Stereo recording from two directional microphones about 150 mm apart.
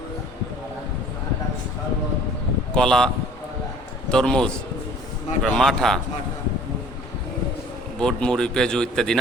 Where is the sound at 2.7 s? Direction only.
5° left (ahead or behind).